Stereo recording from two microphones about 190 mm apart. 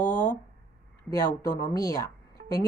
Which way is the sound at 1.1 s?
20° left (ahead or behind).